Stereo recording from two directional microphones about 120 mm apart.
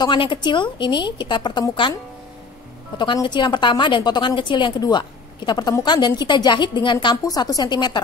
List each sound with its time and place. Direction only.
0.0 s a woman's voice: 40° left (ahead or behind)
3.0 s a woman's voice: 40° left (ahead or behind)